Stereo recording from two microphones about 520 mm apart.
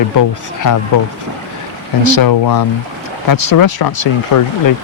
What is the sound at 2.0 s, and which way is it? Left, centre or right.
Speech, left.